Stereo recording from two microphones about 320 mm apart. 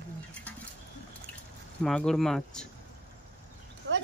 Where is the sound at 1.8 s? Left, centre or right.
Centre.